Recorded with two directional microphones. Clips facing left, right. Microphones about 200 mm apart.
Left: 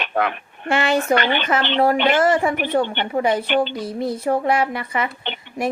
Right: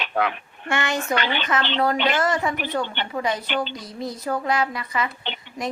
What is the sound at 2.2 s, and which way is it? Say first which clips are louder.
A woman's voice: left 6 dB; 30° left (ahead or behind).